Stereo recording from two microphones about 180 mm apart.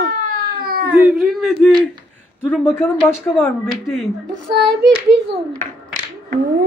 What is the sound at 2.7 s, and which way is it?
Speech, 10° left (ahead or behind).